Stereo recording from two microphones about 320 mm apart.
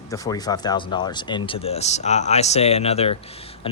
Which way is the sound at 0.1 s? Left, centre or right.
Centre.